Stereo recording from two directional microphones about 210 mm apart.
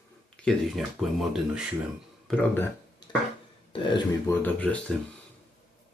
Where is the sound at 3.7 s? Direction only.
20° left (ahead or behind).